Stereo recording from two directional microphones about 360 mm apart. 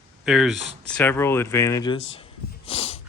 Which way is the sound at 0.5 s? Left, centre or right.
Centre.